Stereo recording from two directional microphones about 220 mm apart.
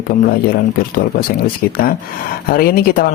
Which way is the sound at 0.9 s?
40° left (ahead or behind).